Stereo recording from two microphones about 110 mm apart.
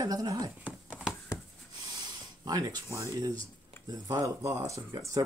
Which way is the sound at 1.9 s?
40° right (ahead or behind).